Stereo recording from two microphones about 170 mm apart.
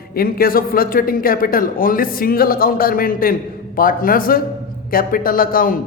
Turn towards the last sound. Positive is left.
turn(degrees=55)  # may be behind; listen again after turning